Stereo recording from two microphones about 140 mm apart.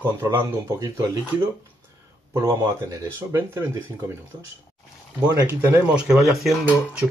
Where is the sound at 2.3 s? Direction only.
25° right (ahead or behind).